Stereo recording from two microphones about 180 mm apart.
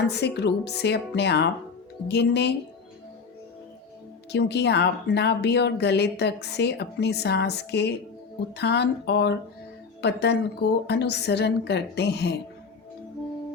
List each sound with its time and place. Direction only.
0.1 s speech: 65° left (ahead or behind)
4.3 s speech: 70° left (ahead or behind)